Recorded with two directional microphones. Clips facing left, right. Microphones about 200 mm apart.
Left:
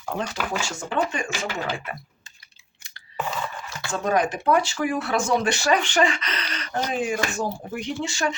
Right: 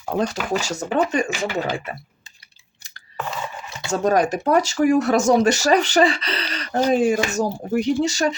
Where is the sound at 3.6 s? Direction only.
20° right (ahead or behind).